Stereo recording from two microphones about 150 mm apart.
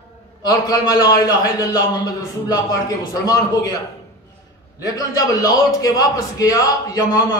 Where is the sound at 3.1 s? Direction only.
25° left (ahead or behind).